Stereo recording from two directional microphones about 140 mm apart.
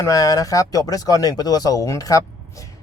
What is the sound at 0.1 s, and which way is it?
Speech, 25° left (ahead or behind).